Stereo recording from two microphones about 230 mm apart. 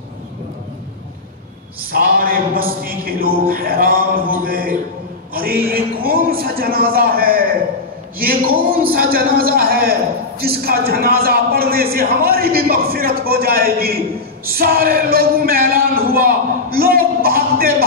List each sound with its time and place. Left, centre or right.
1.9 s a man's voice: right
5.3 s a sound: right
6.0 s a man's voice: right